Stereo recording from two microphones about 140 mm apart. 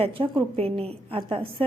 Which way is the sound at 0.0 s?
40° right (ahead or behind).